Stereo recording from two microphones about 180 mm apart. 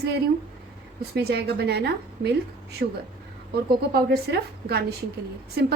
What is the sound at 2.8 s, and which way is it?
A woman's voice, 55° right (ahead or behind).